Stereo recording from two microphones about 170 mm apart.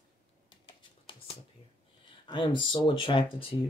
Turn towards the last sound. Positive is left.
turn(degrees=30)  # may be behind; listen again after turning